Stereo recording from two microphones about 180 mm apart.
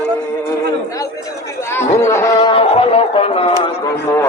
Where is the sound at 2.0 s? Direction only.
15° left (ahead or behind).